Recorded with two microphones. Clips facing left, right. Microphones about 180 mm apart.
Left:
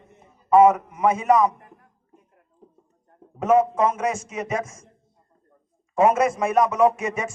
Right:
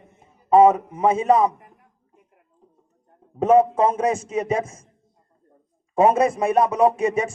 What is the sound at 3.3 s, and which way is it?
Speech, 30° right (ahead or behind).